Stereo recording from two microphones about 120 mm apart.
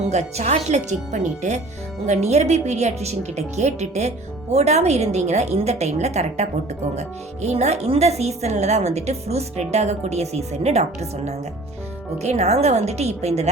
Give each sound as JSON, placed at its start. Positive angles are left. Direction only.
{"t": 0.1, "sound": "a woman's voice", "side_deg": -65}
{"t": 2.0, "sound": "a woman's voice", "side_deg": -70}
{"t": 12.2, "sound": "a woman's voice", "side_deg": -65}